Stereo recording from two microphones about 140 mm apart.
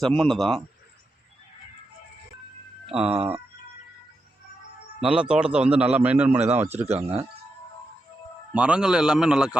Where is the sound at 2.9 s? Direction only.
5° right (ahead or behind).